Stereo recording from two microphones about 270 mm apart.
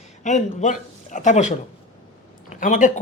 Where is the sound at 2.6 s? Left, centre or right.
Left.